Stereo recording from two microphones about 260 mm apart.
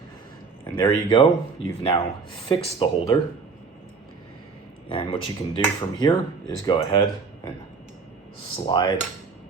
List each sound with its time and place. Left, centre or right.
0.8 s speech: left
4.9 s speech: centre
8.6 s speech: centre